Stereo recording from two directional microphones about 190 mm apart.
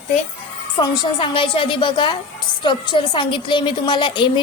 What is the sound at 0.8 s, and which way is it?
A woman's voice, 25° left (ahead or behind).